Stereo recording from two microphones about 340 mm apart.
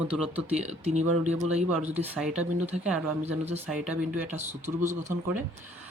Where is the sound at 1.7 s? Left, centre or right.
Centre.